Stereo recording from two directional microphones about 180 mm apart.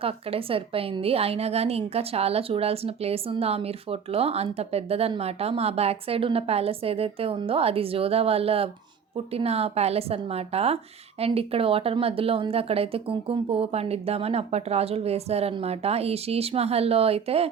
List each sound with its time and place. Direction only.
0.0 s a woman's voice: 30° right (ahead or behind)